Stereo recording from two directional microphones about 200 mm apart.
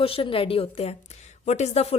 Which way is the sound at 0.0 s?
25° left (ahead or behind).